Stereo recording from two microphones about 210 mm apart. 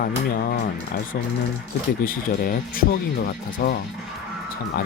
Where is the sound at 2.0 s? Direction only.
40° left (ahead or behind).